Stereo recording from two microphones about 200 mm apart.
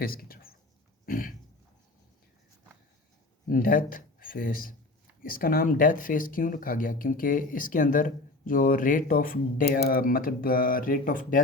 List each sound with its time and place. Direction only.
0.0 s speech: 45° left (ahead or behind)
1.0 s a sound: 45° left (ahead or behind)
3.4 s speech: 45° left (ahead or behind)